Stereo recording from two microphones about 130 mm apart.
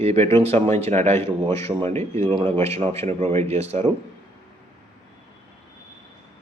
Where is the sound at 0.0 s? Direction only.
55° right (ahead or behind).